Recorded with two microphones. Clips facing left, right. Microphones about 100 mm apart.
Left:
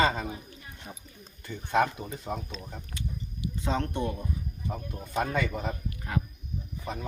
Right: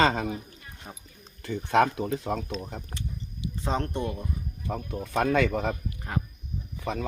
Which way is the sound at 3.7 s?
35° right (ahead or behind).